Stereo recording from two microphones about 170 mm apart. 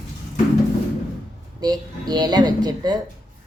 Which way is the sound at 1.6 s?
25° right (ahead or behind).